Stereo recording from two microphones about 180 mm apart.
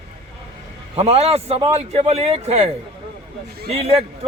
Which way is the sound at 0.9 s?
35° right (ahead or behind).